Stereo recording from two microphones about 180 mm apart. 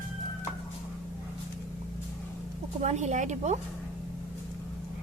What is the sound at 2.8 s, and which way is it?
Speech, 40° right (ahead or behind).